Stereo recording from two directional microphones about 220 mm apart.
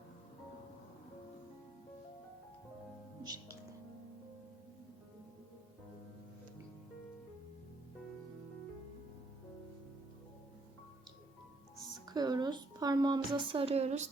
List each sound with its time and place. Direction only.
3.2 s music: 15° right (ahead or behind)
12.0 s a woman's voice: 20° right (ahead or behind)